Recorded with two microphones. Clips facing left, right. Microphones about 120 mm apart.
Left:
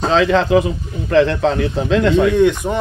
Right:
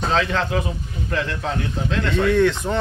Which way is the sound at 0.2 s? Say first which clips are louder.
Left 9 dB; 90° left.